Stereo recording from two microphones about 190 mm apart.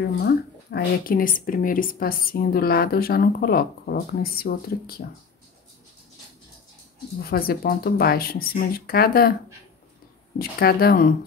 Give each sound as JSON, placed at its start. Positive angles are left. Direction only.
{"t": 0.2, "sound": "a woman's voice", "side_deg": 55}
{"t": 7.2, "sound": "a woman's voice", "side_deg": 50}
{"t": 10.6, "sound": "a woman's voice", "side_deg": 55}